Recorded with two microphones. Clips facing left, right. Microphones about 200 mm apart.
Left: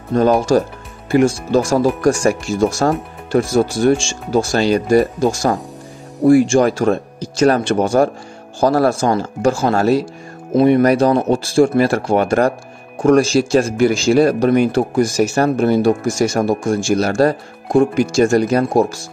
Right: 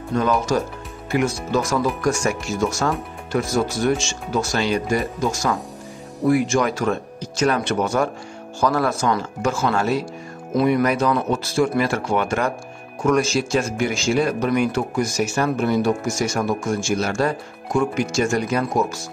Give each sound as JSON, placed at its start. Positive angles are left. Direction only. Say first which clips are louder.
{"t": 0.1, "sound": "speech", "louder": "left 7 dB", "side_deg": 35}